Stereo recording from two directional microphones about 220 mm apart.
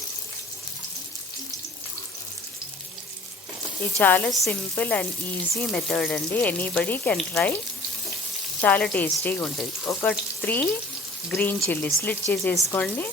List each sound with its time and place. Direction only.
3.9 s speech: 5° left (ahead or behind)
8.6 s speech: 5° left (ahead or behind)